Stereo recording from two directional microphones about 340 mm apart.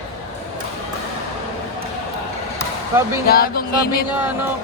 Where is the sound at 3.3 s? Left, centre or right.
Left.